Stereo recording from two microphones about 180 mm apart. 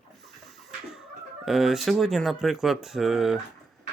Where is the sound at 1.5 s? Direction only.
Centre (ahead or behind).